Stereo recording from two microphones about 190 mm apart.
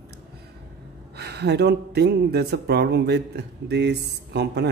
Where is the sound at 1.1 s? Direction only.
60° right (ahead or behind).